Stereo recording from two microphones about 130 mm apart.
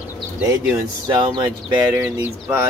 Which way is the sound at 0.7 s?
35° right (ahead or behind).